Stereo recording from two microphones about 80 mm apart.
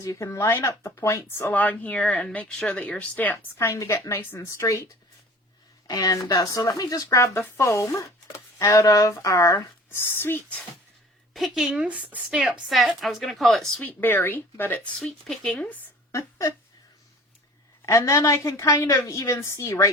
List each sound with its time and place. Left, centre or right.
0.0 s speech: left
1.5 s speech: centre
3.6 s speech: left
4.5 s speech: left
5.9 s speech: left
7.3 s speech: left
9.6 s speech: left
11.3 s a woman's voice: centre
12.3 s speech: centre
13.8 s speech: left
15.3 s speech: centre
17.8 s speech: left